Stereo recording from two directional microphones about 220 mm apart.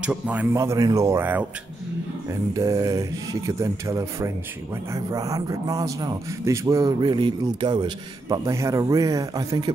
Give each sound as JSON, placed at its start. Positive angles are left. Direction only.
{"t": 0.0, "sound": "a man's voice", "side_deg": -5}